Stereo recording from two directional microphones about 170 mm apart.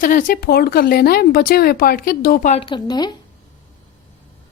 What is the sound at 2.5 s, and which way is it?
Speech, 30° left (ahead or behind).